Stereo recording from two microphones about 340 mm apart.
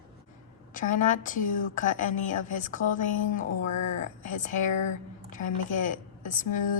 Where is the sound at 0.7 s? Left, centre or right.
Left.